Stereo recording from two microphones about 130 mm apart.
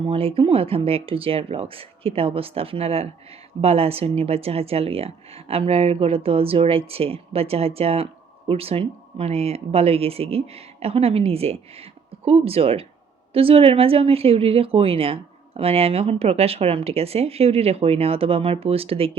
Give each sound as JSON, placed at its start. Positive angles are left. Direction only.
{"t": 0.0, "sound": "speech", "side_deg": -45}